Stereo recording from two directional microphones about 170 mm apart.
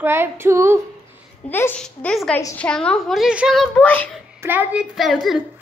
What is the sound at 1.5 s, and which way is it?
A child's voice, 10° left (ahead or behind).